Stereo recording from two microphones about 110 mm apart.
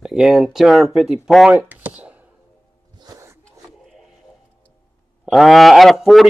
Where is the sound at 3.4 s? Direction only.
Centre (ahead or behind).